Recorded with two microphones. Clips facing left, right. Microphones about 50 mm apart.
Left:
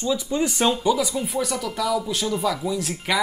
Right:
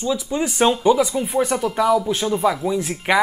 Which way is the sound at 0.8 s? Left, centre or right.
Right.